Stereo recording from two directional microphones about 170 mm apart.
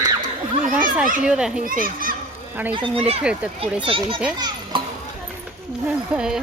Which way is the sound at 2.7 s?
30° right (ahead or behind).